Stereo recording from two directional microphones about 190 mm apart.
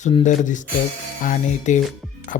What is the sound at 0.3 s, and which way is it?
Speech, 40° left (ahead or behind).